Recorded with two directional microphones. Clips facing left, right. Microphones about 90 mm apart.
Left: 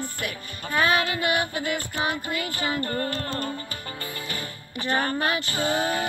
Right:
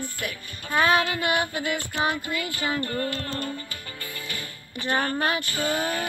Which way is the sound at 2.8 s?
35° left (ahead or behind).